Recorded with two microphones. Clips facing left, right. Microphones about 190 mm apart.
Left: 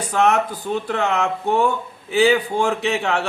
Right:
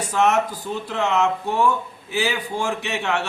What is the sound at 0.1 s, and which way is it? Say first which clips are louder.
A man's voice: left 2 dB; 60° left (ahead or behind).